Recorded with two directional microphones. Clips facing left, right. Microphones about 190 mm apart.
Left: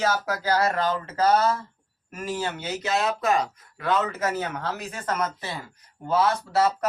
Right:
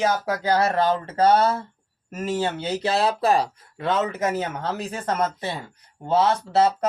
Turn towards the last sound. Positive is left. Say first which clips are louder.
# right 3 dB
turn(degrees=-30)  # may be behind; listen again after turning